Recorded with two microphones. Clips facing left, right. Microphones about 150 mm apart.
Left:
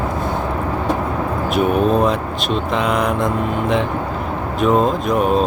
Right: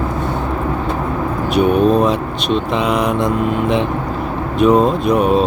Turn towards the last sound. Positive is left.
turn(degrees=0)  # may be behind; listen again after turning